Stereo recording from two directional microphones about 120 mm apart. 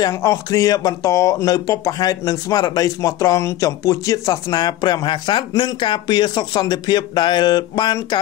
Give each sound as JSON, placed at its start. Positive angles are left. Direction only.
{"t": 0.0, "sound": "speech", "side_deg": 30}